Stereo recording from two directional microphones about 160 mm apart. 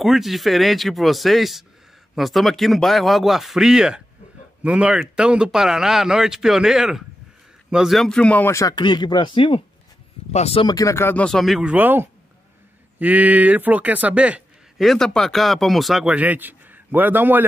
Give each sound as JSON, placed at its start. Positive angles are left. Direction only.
{"t": 0.0, "sound": "speech", "side_deg": 0}
{"t": 8.7, "sound": "speech", "side_deg": 30}
{"t": 10.7, "sound": "speech", "side_deg": 20}